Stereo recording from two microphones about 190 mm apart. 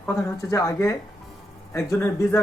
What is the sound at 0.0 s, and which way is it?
Speech, 15° left (ahead or behind).